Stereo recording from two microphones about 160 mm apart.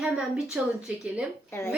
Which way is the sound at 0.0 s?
5° right (ahead or behind).